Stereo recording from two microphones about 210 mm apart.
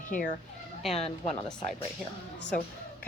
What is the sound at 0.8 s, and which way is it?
Speech, centre (ahead or behind).